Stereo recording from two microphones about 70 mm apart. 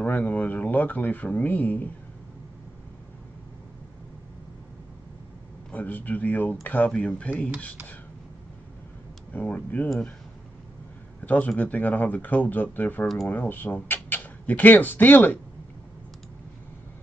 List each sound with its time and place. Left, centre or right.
0.0 s speech: left
5.7 s speech: left
6.9 s speech: centre
9.3 s speech: left
11.2 s speech: left